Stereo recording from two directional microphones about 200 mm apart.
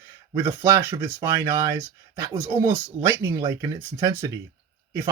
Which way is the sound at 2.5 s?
10° right (ahead or behind).